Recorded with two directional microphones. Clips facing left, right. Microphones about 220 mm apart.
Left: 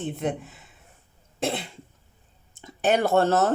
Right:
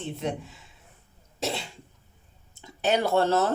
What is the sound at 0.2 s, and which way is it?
Speech, 50° left (ahead or behind).